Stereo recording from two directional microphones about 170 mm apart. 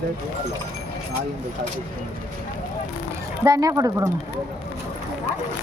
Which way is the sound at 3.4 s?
20° right (ahead or behind).